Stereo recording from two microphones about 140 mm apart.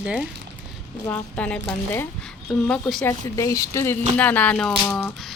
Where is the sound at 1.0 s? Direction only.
10° left (ahead or behind).